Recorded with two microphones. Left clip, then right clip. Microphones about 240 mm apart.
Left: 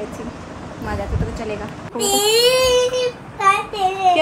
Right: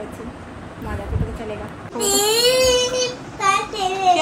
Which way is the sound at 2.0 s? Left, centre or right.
Centre.